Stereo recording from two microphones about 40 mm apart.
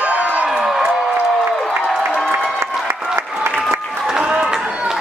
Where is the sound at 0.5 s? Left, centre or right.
Centre.